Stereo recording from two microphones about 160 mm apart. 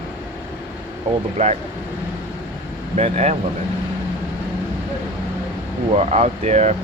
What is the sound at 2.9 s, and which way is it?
Speech, 45° right (ahead or behind).